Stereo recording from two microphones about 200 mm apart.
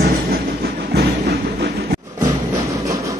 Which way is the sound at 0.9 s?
50° right (ahead or behind).